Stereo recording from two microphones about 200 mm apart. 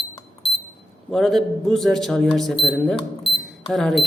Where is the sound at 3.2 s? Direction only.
55° left (ahead or behind).